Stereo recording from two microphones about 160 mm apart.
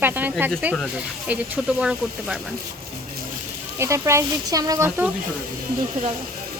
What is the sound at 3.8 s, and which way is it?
Speech, 15° right (ahead or behind).